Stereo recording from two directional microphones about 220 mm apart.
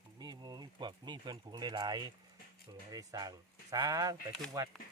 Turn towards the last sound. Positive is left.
turn(degrees=-15)  # may be behind; listen again after turning